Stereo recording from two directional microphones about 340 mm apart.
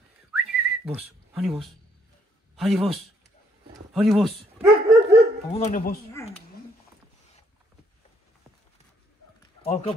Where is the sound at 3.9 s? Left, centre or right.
Centre.